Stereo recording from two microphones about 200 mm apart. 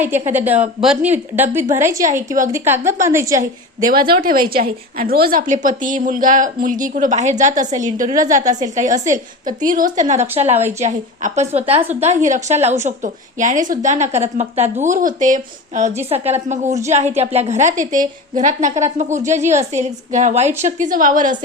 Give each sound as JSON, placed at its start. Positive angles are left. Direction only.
{"t": 0.3, "sound": "a woman's voice", "side_deg": -10}
{"t": 2.0, "sound": "a woman's voice", "side_deg": -40}
{"t": 2.5, "sound": "a woman's voice", "side_deg": -10}
{"t": 3.8, "sound": "a woman's voice", "side_deg": -50}